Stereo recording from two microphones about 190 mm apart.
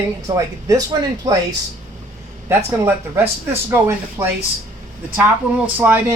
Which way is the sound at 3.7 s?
10° right (ahead or behind).